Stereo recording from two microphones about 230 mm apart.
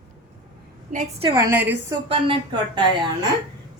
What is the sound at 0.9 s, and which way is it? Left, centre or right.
Speech, right.